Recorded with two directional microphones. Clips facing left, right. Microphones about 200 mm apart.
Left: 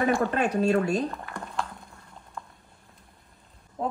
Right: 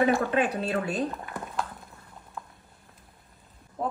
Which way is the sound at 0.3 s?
45° left (ahead or behind).